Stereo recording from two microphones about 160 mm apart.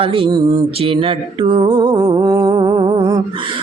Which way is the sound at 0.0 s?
35° right (ahead or behind).